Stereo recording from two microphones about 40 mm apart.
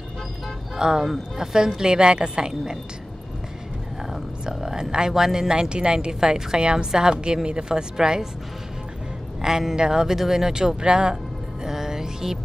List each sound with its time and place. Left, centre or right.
0.7 s a woman's voice: centre
4.1 s a woman's voice: centre
9.4 s a woman's voice: centre
11.6 s music: centre